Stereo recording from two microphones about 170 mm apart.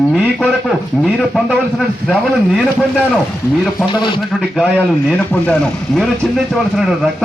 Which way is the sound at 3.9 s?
25° left (ahead or behind).